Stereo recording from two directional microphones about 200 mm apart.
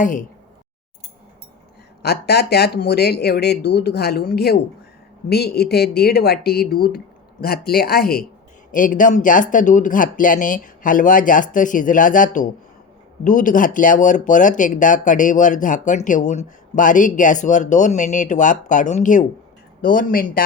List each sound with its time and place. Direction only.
0.0 s speech: 40° left (ahead or behind)
2.0 s a woman's voice: 55° left (ahead or behind)